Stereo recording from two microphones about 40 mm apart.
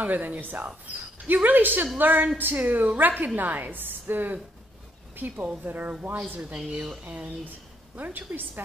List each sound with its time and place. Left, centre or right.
0.0 s a woman's voice: right
0.8 s a woman's voice: right
5.6 s a woman's voice: right
7.1 s a woman's voice: right